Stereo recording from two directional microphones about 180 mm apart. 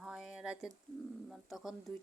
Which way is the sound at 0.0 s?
5° right (ahead or behind).